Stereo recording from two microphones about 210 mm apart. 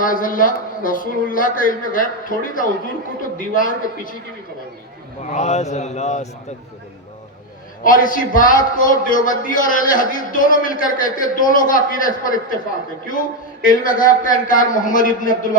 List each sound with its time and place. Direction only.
0.0 s a man's voice: 40° left (ahead or behind)
5.2 s a man's voice: 35° left (ahead or behind)
7.9 s a man's voice: 40° left (ahead or behind)
13.7 s a man's voice: 40° left (ahead or behind)